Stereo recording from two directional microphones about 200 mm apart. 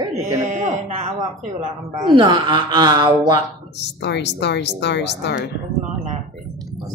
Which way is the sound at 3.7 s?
60° left (ahead or behind).